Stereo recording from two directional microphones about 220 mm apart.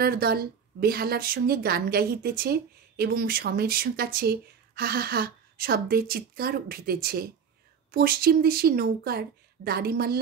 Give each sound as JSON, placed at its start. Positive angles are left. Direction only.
{"t": 0.0, "sound": "speech", "side_deg": -45}